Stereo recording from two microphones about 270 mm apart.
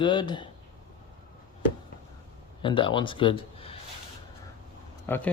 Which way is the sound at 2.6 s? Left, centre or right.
Centre.